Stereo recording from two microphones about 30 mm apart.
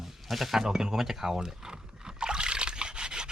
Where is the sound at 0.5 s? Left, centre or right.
Centre.